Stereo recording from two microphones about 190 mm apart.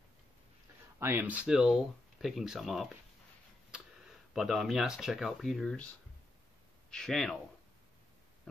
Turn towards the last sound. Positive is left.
turn(degrees=0)  # may be behind; listen again after turning